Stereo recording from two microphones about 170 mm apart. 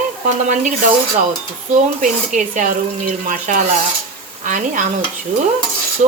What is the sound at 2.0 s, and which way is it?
Speech, 45° right (ahead or behind).